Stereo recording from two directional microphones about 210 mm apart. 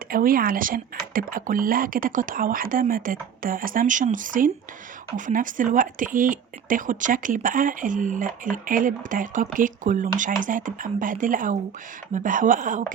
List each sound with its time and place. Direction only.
0.1 s speech: 45° right (ahead or behind)